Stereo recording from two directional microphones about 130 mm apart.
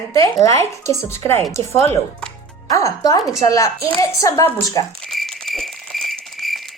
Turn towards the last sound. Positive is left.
turn(degrees=0)  # may be behind; listen again after turning